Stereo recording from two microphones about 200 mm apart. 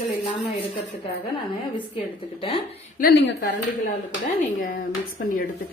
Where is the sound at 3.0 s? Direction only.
45° left (ahead or behind).